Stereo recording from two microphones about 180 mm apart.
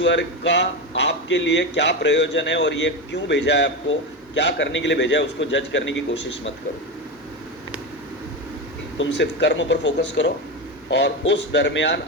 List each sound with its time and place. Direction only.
0.0 s a man's voice: 85° left
9.0 s speech: 80° left
10.9 s speech: 75° left (ahead or behind)